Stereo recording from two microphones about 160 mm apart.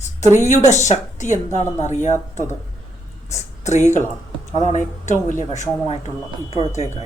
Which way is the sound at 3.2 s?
45° left (ahead or behind).